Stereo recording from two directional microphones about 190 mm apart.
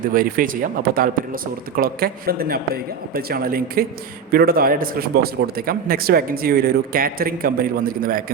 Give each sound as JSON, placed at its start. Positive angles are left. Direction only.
{"t": 0.0, "sound": "a man's voice", "side_deg": -50}